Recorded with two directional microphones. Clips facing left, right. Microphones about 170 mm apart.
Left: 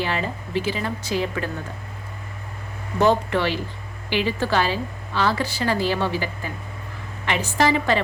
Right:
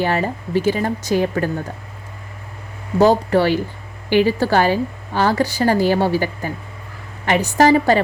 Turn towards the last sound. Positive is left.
turn(degrees=-40)  # may be behind; listen again after turning